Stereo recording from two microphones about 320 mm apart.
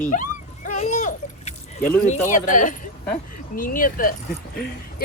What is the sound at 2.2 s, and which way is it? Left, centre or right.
Speech, left.